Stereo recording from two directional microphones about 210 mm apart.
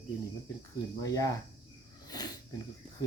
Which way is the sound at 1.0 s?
15° left (ahead or behind).